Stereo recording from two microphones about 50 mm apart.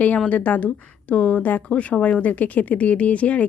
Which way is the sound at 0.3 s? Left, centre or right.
Left.